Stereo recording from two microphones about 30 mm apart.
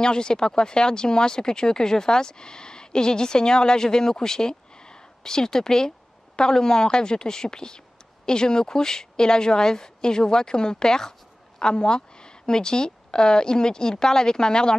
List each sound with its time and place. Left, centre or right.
0.0 s a woman's voice: left
11.6 s a woman's voice: left